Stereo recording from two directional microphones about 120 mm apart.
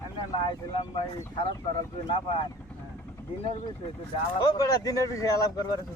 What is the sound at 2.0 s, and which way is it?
Speech, 45° left (ahead or behind).